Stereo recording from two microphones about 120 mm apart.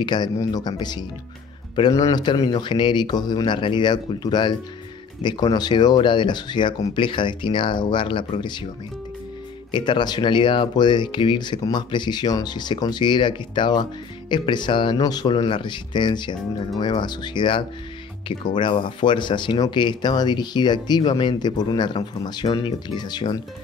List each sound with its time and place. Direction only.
0.0 s speech: 40° left (ahead or behind)
9.7 s speech: 40° left (ahead or behind)